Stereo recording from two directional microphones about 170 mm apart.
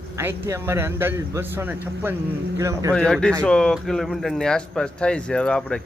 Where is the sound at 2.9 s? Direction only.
5° left (ahead or behind).